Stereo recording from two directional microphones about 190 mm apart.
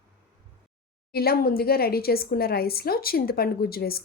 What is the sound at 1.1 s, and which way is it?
A woman's voice, 55° left (ahead or behind).